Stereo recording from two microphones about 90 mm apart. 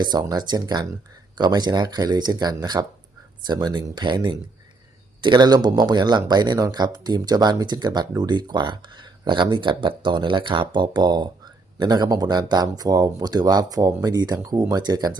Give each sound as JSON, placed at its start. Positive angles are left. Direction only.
{"t": 0.0, "sound": "speech", "side_deg": -50}